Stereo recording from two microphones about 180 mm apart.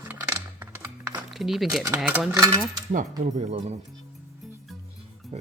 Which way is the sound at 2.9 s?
40° right (ahead or behind).